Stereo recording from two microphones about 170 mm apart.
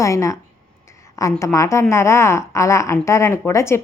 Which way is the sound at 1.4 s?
20° left (ahead or behind).